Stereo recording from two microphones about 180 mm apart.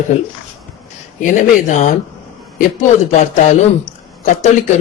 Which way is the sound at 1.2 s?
45° left (ahead or behind).